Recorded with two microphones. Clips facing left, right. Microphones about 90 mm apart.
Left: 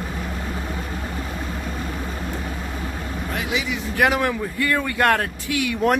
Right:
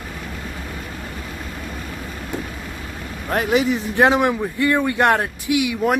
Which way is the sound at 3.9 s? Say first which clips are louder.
Right 3 dB; 25° right (ahead or behind).